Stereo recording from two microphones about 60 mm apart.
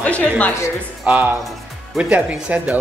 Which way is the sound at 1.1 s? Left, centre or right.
Right.